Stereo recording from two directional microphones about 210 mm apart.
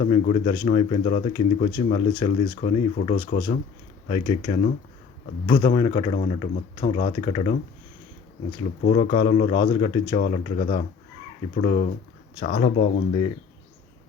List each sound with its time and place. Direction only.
0.0 s speech: 30° left (ahead or behind)
8.8 s speech: 35° left (ahead or behind)